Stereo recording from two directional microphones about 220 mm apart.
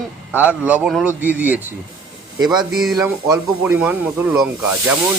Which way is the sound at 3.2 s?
15° right (ahead or behind).